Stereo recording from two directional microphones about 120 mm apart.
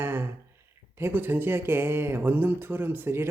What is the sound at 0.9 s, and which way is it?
Speech, 20° right (ahead or behind).